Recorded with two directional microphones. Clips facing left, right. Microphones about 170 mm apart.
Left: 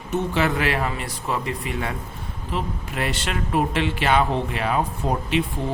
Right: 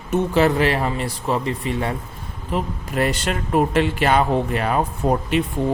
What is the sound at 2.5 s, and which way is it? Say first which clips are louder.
Speech: right 4 dB; 40° right (ahead or behind).